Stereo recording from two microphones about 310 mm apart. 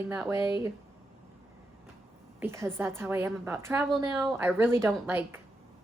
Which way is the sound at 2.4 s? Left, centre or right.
Centre.